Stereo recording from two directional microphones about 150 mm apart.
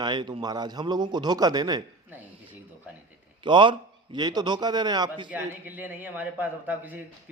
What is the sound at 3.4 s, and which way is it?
A man's voice, 30° right (ahead or behind).